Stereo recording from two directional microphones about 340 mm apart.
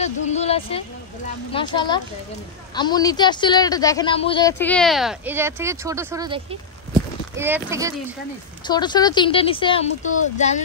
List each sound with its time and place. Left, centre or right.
0.0 s a woman's voice: centre
8.6 s a woman's voice: centre